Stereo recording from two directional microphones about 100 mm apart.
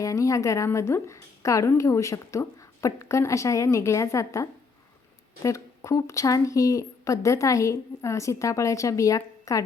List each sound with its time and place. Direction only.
0.0 s a woman's voice: 30° left (ahead or behind)